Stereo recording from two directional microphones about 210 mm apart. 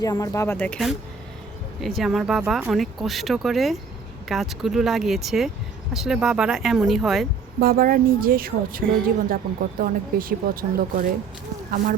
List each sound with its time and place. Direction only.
0.0 s speech: 15° left (ahead or behind); by 7.3 s centre (ahead or behind)
7.6 s a woman's voice: 45° right (ahead or behind)